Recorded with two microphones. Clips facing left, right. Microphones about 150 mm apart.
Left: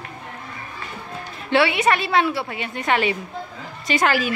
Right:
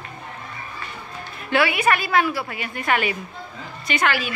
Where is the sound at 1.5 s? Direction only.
25° left (ahead or behind).